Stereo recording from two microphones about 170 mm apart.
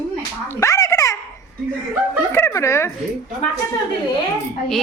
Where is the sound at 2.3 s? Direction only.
20° left (ahead or behind).